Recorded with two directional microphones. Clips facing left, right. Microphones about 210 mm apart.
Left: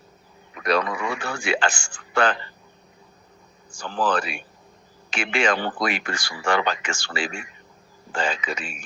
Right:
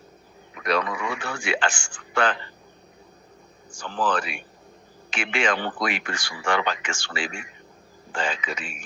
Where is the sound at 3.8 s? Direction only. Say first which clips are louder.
Left 2 dB; 40° left (ahead or behind).